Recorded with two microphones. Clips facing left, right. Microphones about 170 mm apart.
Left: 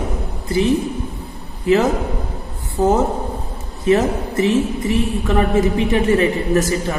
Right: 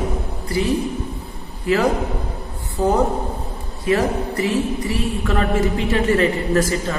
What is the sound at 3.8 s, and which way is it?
A man's voice, 20° left (ahead or behind).